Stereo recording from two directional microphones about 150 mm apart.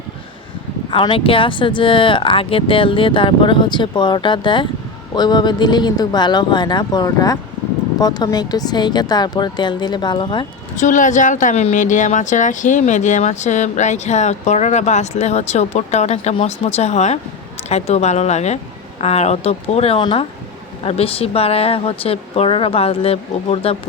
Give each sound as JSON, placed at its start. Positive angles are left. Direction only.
{"t": 0.9, "sound": "speech", "side_deg": 35}
{"t": 10.8, "sound": "speech", "side_deg": 55}
{"t": 20.0, "sound": "speech", "side_deg": 30}
{"t": 20.8, "sound": "speech", "side_deg": 40}